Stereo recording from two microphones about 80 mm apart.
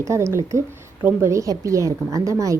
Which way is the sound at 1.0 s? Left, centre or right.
Right.